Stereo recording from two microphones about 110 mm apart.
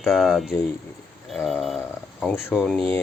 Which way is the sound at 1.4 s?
Centre (ahead or behind).